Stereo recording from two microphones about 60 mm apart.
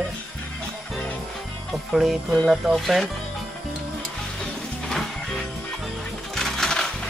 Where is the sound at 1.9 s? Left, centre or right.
Centre.